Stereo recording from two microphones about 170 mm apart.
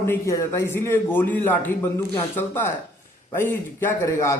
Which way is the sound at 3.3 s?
15° left (ahead or behind).